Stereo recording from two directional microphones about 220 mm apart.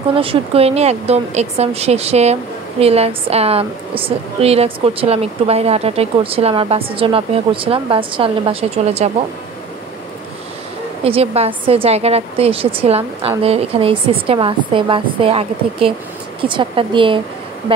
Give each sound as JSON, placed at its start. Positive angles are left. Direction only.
{"t": 0.1, "sound": "a woman's voice", "side_deg": -25}
{"t": 11.1, "sound": "a woman's voice", "side_deg": -25}